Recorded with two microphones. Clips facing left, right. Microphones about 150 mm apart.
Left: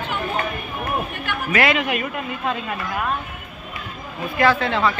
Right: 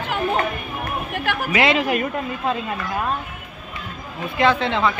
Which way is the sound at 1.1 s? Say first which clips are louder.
Right 4 dB; 90° right.